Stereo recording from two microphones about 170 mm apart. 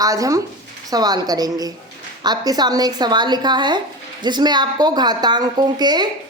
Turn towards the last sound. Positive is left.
turn(degrees=-25)  # may be behind; listen again after turning